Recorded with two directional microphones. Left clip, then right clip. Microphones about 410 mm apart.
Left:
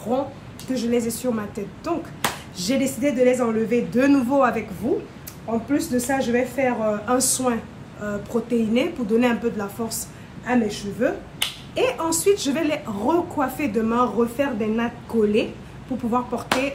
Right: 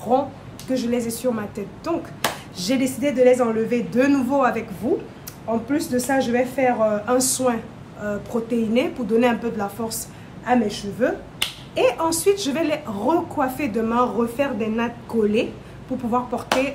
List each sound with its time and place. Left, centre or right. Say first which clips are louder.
0.1 s speech: right 6 dB; centre
5.7 s speech: even; centre
16.1 s speech: right 1 dB; centre